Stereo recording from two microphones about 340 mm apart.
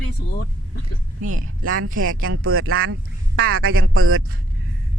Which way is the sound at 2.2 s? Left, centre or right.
Right.